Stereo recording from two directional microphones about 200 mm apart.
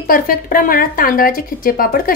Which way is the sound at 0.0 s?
45° left (ahead or behind).